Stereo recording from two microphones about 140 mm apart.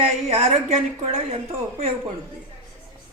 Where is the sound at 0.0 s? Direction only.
45° right (ahead or behind).